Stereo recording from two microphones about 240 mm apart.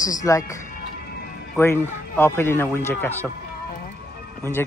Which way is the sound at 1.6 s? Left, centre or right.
Centre.